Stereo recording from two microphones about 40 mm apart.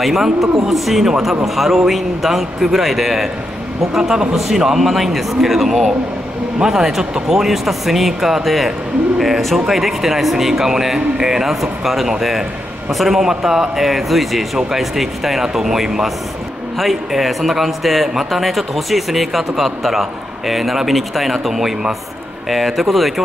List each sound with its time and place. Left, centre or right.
0.0 s a man's voice: centre
3.9 s a man's voice: centre
4.5 s a man's voice: centre
13.2 s a man's voice: centre